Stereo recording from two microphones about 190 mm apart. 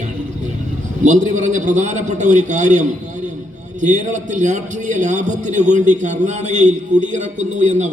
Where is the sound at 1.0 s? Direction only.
40° right (ahead or behind).